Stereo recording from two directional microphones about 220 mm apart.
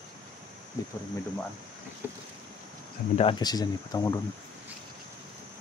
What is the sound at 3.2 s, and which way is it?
Speech, 20° left (ahead or behind).